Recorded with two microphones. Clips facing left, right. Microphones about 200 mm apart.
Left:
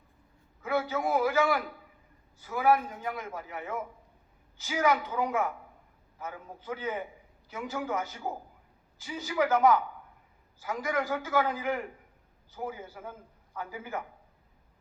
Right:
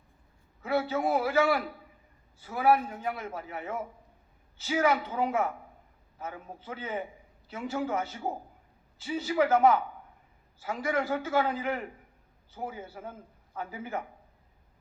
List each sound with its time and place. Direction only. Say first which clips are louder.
0.6 s a man's voice: right 1 dB; 30° right (ahead or behind)